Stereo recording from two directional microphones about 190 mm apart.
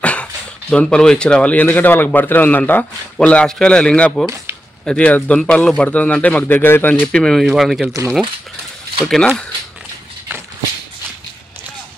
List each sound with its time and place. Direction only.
0.0 s speech: 5° left (ahead or behind)
9.0 s speech: centre (ahead or behind)